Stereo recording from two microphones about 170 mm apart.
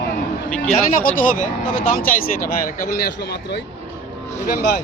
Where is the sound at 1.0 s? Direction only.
55° left (ahead or behind).